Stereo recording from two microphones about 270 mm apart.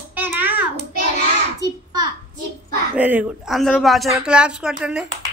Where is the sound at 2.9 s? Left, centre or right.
Centre.